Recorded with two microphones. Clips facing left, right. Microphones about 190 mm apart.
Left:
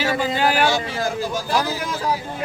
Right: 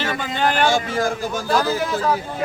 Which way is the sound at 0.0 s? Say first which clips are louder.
Left 2 dB; 10° left (ahead or behind).